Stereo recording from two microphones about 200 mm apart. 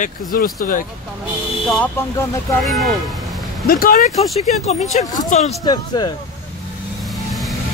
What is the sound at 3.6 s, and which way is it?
Speech, 45° left (ahead or behind).